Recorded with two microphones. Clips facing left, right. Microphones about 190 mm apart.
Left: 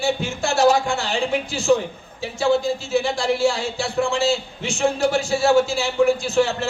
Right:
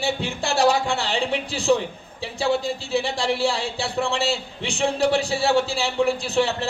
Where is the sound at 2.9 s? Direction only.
35° right (ahead or behind).